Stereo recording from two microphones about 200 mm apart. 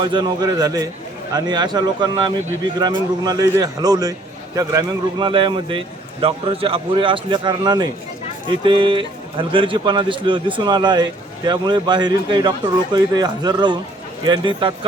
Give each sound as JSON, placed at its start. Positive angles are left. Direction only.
{"t": 0.0, "sound": "speech", "side_deg": -25}